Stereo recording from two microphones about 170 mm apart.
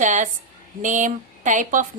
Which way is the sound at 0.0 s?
45° right (ahead or behind).